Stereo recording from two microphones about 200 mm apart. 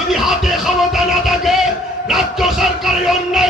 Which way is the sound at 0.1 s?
Centre (ahead or behind).